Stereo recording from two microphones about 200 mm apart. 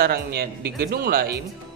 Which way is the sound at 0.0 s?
50° right (ahead or behind).